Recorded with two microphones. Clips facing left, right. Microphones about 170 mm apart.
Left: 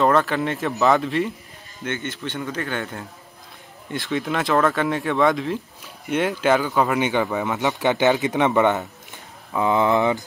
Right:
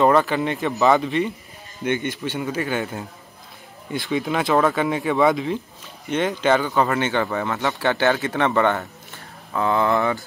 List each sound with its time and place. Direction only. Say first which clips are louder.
0.0 s speech: right 2 dB; centre (ahead or behind)
1.9 s a man's voice: right 5 dB; 15° right (ahead or behind)
6.0 s speech: even; 10° left (ahead or behind)